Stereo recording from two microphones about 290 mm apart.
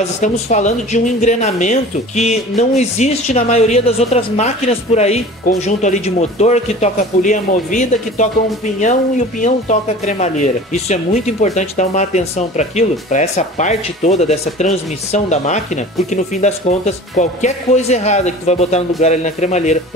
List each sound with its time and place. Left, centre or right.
0.0 s speech: left
9.4 s speech: left